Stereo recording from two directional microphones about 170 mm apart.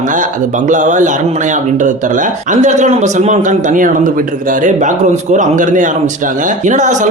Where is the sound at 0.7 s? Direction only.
50° right (ahead or behind).